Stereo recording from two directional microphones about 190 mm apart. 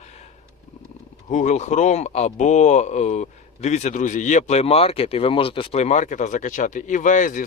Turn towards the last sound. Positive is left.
turn(degrees=40)  # may be behind; listen again after turning